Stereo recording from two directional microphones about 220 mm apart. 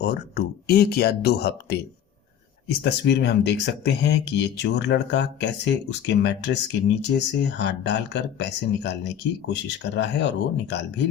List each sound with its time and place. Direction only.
0.0 s speech: 50° left (ahead or behind)
2.8 s speech: 50° left (ahead or behind)